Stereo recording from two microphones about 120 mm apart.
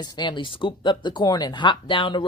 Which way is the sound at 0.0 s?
35° left (ahead or behind).